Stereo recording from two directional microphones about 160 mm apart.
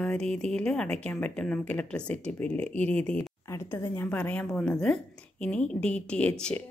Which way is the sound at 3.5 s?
15° left (ahead or behind).